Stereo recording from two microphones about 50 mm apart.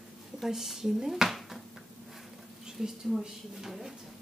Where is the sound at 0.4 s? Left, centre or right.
Centre.